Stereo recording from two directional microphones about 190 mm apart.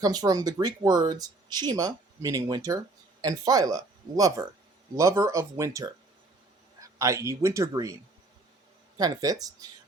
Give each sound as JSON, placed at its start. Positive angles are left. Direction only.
{"t": 0.0, "sound": "speech", "side_deg": -20}
{"t": 4.9, "sound": "a man's voice", "side_deg": -15}
{"t": 9.0, "sound": "speech", "side_deg": -20}